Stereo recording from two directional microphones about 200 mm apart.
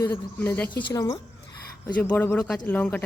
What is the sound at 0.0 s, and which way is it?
A woman's voice, 10° left (ahead or behind).